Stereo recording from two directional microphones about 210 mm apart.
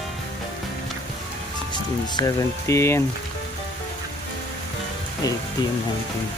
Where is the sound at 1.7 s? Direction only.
20° left (ahead or behind).